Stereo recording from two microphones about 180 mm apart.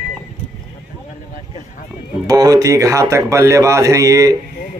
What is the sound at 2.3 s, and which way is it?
Speech, 20° right (ahead or behind).